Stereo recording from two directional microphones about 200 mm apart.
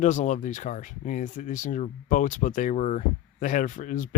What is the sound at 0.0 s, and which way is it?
Speech, 40° left (ahead or behind).